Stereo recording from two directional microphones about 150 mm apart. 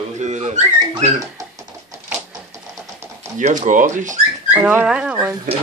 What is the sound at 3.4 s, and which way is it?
Speech, 55° right (ahead or behind).